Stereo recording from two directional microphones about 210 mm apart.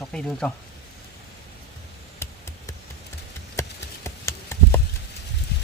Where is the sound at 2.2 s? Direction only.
15° left (ahead or behind).